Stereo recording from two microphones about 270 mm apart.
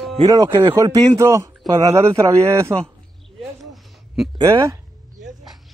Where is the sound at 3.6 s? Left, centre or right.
Centre.